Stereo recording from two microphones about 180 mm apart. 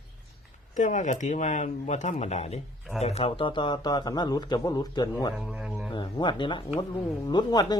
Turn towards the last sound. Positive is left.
turn(degrees=25)  # may be behind; listen again after turning